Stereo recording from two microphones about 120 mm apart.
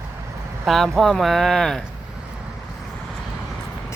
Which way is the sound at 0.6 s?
Centre (ahead or behind).